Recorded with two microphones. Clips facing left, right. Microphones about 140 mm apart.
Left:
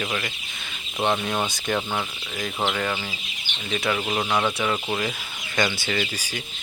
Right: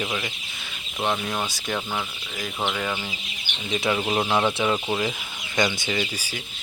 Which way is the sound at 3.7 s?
20° right (ahead or behind).